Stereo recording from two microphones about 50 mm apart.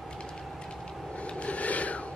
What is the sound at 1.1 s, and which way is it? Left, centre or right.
Filing, left.